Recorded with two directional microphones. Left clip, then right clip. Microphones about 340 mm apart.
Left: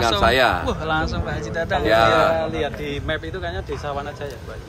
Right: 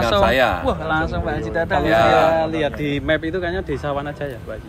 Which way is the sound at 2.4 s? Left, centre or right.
Right.